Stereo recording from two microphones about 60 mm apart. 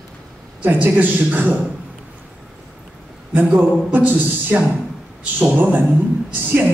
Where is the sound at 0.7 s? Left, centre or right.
Right.